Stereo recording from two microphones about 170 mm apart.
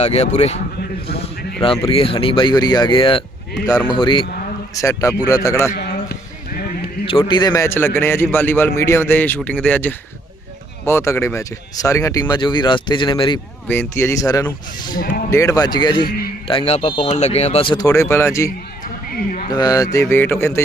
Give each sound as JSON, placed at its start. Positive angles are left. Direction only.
{"t": 0.0, "sound": "speech", "side_deg": 40}
{"t": 0.8, "sound": "a man's voice", "side_deg": 70}
{"t": 1.6, "sound": "speech", "side_deg": 35}
{"t": 4.7, "sound": "speech", "side_deg": 20}
{"t": 5.7, "sound": "a sound", "side_deg": 60}
{"t": 7.1, "sound": "a man's voice", "side_deg": 30}
{"t": 13.7, "sound": "a man's voice", "side_deg": 15}
{"t": 16.0, "sound": "a man's voice", "side_deg": 65}
{"t": 16.5, "sound": "a man's voice", "side_deg": 35}